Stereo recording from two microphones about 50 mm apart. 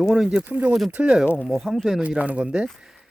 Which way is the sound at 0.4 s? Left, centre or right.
Right.